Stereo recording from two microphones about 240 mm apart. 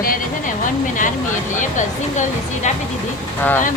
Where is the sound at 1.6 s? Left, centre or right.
Left.